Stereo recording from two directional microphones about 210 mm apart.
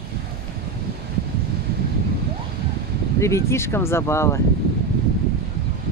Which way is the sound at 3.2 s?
15° left (ahead or behind).